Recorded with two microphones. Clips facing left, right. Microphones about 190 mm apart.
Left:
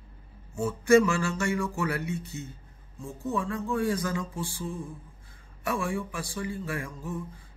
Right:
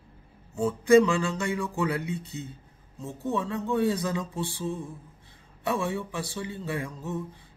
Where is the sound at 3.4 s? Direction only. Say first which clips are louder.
Right 4 dB; 20° right (ahead or behind).